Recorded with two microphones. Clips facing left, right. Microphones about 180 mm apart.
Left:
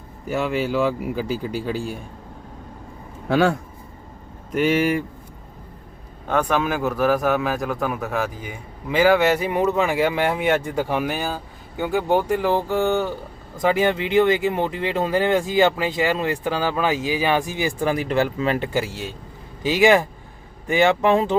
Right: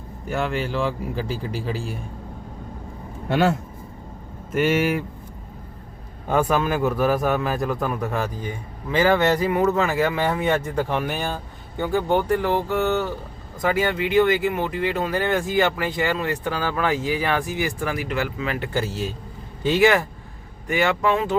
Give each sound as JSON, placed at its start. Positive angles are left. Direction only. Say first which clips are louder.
{"t": 0.3, "sound": "a man's voice", "louder": "left 3 dB", "side_deg": 0}
{"t": 3.2, "sound": "a man's voice", "louder": "left 2 dB", "side_deg": 0}
{"t": 6.2, "sound": "a man's voice", "louder": "even", "side_deg": -5}
{"t": 9.4, "sound": "speech", "louder": "even", "side_deg": 20}
{"t": 13.6, "sound": "speech", "louder": "left 2 dB", "side_deg": 25}
{"t": 17.5, "sound": "speech", "louder": "left 3 dB", "side_deg": 25}
{"t": 19.6, "sound": "speech", "louder": "left 2 dB", "side_deg": 15}